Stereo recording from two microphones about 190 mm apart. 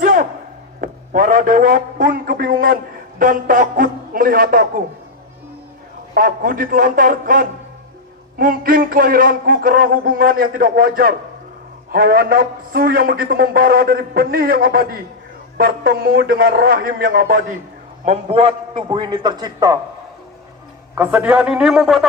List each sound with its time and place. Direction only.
0.0 s a sound: 45° right (ahead or behind)
0.7 s a man's voice: 45° right (ahead or behind)
6.1 s a man's voice: 45° right (ahead or behind)
18.0 s a man's voice: 30° right (ahead or behind)
20.9 s a man's voice: 10° right (ahead or behind)